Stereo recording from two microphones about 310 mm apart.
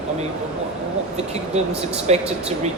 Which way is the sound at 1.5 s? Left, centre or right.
Right.